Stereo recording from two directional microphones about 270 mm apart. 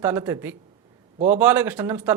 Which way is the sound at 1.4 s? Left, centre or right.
Centre.